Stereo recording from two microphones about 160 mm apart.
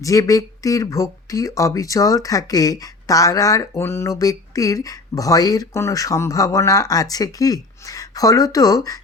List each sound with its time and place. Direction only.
0.0 s speech: 20° left (ahead or behind)